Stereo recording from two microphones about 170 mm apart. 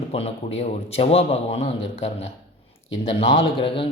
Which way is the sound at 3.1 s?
35° left (ahead or behind).